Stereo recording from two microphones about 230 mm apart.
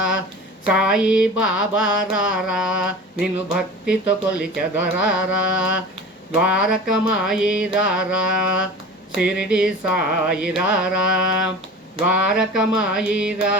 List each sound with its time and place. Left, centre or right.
0.7 s mantra: centre